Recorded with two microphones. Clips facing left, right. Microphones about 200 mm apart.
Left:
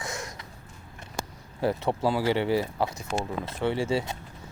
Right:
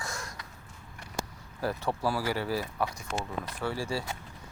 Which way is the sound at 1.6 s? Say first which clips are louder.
Left 5 dB; 25° left (ahead or behind).